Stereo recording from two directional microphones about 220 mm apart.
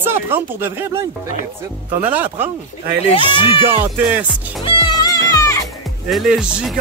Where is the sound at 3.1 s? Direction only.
25° left (ahead or behind).